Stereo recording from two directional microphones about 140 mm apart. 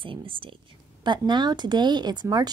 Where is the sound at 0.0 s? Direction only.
40° right (ahead or behind).